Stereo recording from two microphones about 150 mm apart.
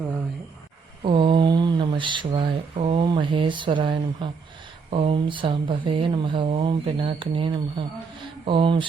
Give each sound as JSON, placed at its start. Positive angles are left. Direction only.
{"t": 1.0, "sound": "speech", "side_deg": -35}